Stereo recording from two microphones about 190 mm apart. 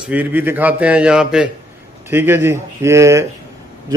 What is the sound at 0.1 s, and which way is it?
A man's voice, 10° right (ahead or behind).